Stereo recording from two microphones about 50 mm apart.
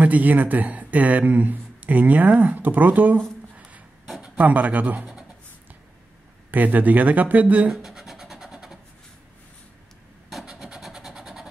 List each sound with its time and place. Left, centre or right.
0.0 s speech: right
4.2 s speech: right
6.5 s speech: right
7.7 s a sound: centre
10.6 s vehicle: centre